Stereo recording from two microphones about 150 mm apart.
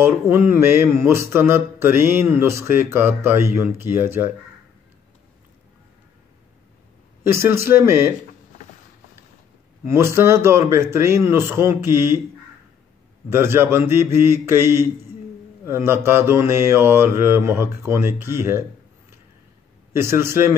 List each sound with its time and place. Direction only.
0.0 s mantra: 15° right (ahead or behind)
7.4 s mantra: 15° right (ahead or behind)
9.8 s mantra: 15° right (ahead or behind)
13.3 s mantra: 15° right (ahead or behind)
19.9 s mantra: 15° right (ahead or behind)